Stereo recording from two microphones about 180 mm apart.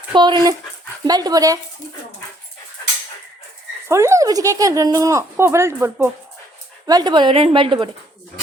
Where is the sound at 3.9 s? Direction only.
15° right (ahead or behind).